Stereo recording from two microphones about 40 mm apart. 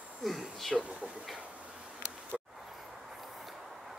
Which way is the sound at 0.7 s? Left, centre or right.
Right.